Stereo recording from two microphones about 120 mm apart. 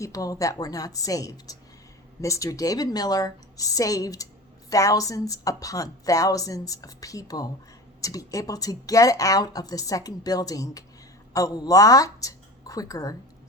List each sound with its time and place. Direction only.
0.0 s a woman's voice: 30° left (ahead or behind)